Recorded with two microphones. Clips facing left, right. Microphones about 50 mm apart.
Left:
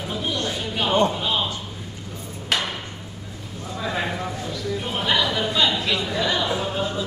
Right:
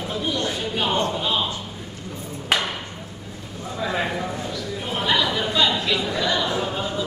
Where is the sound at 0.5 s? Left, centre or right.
Centre.